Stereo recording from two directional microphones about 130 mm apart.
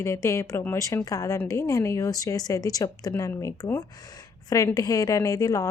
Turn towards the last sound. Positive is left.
turn(degrees=25)  # may be behind; listen again after turning